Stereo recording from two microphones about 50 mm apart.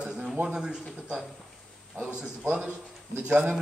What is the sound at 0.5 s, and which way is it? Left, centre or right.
Speech, centre.